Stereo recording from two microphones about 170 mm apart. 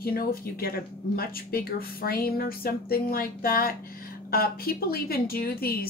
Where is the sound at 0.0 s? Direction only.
65° left (ahead or behind).